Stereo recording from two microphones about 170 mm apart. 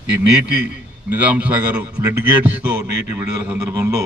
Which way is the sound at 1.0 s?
10° right (ahead or behind).